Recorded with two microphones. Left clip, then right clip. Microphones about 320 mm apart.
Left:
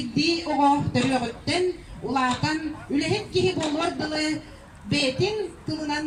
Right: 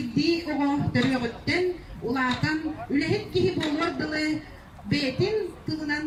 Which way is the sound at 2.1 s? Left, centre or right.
Centre.